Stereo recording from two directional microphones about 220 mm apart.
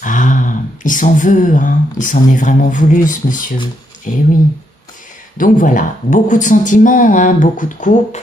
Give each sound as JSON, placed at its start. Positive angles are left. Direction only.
{"t": 0.0, "sound": "speech", "side_deg": 35}
{"t": 5.4, "sound": "speech", "side_deg": 35}